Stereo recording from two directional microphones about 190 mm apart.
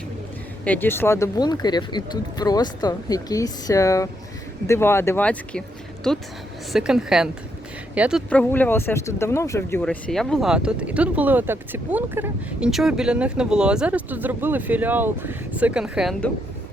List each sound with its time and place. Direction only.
0.6 s speech: 10° left (ahead or behind); by 8.2 s 5° right (ahead or behind)
8.3 s speech: 10° left (ahead or behind)